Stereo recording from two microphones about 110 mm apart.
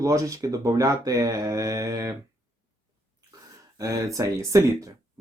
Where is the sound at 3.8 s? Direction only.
30° right (ahead or behind).